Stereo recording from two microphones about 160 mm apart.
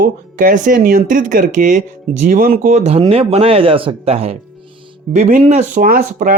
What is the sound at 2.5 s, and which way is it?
Speech, 45° right (ahead or behind).